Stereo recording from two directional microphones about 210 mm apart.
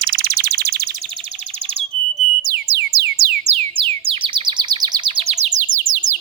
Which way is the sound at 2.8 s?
55° right (ahead or behind).